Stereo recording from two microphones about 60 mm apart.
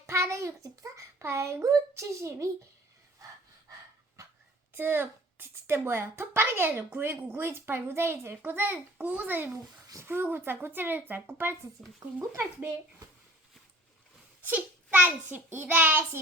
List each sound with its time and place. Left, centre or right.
0.1 s a sound: right
1.2 s a child's voice: right
4.8 s a child's voice: right
11.8 s speech: centre
14.4 s a child's voice: right